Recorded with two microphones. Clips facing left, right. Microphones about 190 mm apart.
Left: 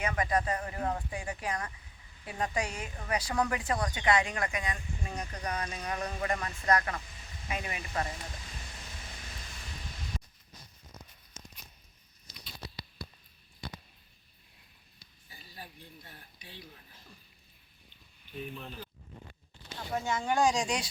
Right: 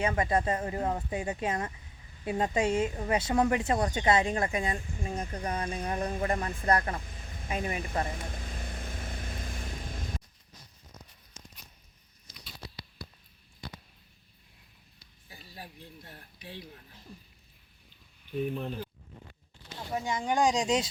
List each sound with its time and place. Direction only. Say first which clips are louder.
0.0 s speech: right 3 dB; 30° right (ahead or behind)
7.5 s speech: right 5 dB; 45° right (ahead or behind)
8.0 s vehicle: right 4 dB; 55° right (ahead or behind)
18.3 s speech: right 9 dB; 50° right (ahead or behind)
19.9 s speech: right 1 dB; 15° right (ahead or behind)